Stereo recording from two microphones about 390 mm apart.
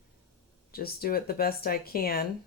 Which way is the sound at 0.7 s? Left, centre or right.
Left.